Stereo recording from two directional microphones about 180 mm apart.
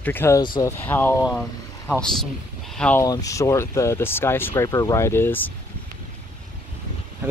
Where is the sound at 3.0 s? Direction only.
20° left (ahead or behind).